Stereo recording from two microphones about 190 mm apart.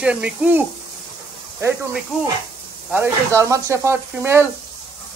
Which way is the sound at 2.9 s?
15° right (ahead or behind).